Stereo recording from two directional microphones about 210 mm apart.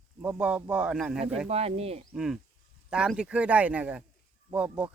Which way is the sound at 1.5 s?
30° right (ahead or behind).